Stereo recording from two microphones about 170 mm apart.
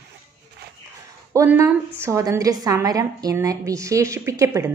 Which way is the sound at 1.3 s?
15° right (ahead or behind).